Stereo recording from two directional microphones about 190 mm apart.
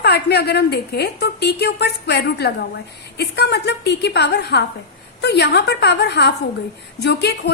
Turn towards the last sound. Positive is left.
turn(degrees=60)  # may be behind; listen again after turning